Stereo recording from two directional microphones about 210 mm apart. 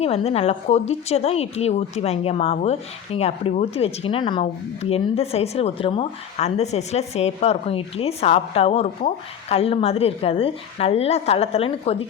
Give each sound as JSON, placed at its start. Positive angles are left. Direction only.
{"t": 0.0, "sound": "a woman's voice", "side_deg": 30}